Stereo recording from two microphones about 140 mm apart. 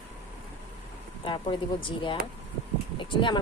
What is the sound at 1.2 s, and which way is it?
Speech, 35° left (ahead or behind).